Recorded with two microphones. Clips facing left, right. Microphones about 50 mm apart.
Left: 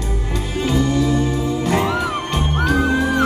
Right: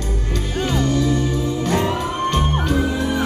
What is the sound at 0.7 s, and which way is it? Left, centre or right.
Music, centre.